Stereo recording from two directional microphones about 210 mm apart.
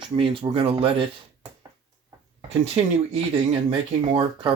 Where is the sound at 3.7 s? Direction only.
25° right (ahead or behind).